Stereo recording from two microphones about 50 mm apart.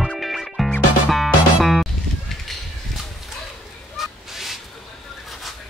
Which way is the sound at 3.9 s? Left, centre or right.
Centre.